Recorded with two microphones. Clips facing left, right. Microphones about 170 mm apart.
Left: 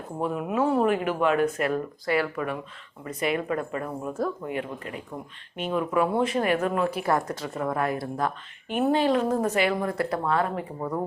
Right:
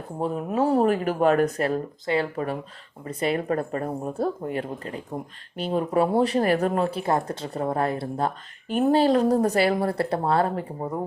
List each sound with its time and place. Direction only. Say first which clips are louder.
0.2 s speech: right 1 dB; 35° right (ahead or behind)